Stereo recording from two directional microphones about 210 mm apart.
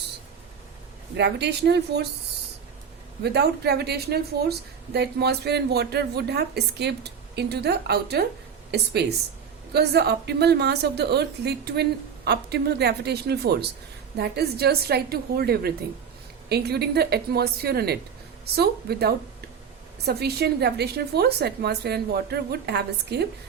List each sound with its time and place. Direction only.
1.1 s a woman's voice: 55° right (ahead or behind)
3.2 s a woman's voice: 50° right (ahead or behind)